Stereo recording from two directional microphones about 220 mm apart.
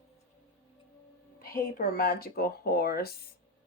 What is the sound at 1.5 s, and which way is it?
Speech, 40° left (ahead or behind).